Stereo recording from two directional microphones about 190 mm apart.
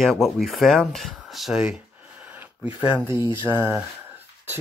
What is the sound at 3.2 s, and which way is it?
Mantra, 20° left (ahead or behind).